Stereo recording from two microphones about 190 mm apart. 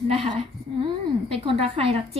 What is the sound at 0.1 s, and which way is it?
A woman's voice, 30° right (ahead or behind).